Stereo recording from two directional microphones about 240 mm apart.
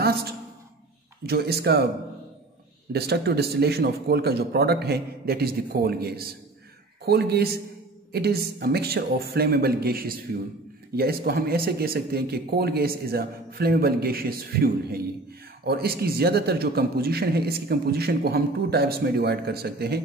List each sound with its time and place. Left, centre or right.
1.2 s speech: right
2.9 s speech: right